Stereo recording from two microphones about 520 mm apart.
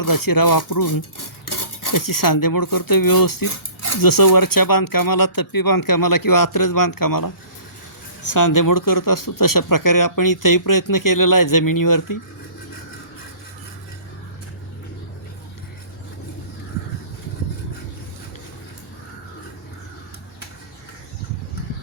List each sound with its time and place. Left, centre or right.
0.0 s speech: left